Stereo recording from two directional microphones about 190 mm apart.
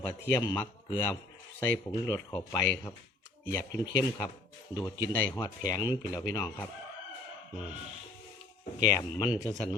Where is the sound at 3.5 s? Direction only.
20° left (ahead or behind).